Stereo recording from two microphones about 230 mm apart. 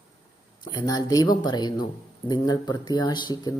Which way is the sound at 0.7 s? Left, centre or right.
Centre.